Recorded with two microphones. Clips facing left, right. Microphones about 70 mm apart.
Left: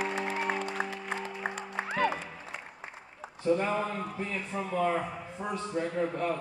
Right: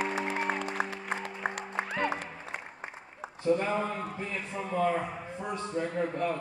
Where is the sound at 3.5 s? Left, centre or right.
Centre.